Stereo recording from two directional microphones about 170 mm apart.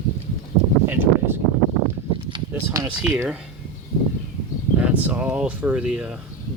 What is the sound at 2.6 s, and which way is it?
Speech, 10° right (ahead or behind).